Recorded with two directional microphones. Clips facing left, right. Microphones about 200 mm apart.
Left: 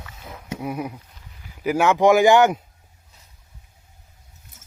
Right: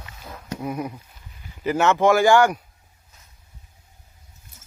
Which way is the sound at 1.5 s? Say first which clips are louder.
Left 1 dB; 10° left (ahead or behind).